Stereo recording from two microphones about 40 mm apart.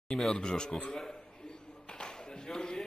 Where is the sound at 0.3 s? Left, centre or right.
Left.